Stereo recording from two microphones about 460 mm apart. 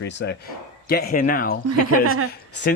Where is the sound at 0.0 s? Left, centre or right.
Left.